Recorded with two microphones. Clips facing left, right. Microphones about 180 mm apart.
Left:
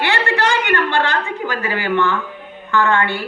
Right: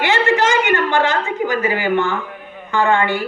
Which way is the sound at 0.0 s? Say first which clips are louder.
Right 3 dB; 20° right (ahead or behind).